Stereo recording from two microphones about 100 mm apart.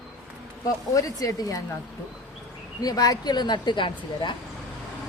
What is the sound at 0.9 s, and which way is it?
Speech, 35° left (ahead or behind).